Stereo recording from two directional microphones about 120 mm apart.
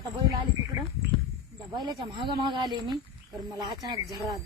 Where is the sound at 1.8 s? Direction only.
40° right (ahead or behind).